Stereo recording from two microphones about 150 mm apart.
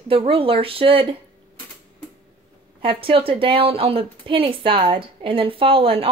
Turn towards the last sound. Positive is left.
turn(degrees=-35)  # may be behind; listen again after turning